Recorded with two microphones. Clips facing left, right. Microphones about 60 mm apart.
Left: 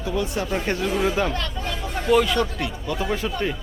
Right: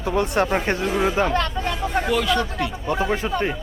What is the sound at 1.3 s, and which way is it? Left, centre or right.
Speech, right.